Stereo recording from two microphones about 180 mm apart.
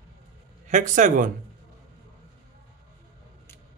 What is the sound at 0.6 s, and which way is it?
Speech, 45° right (ahead or behind).